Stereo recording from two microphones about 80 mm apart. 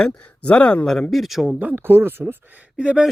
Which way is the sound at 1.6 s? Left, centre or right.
Right.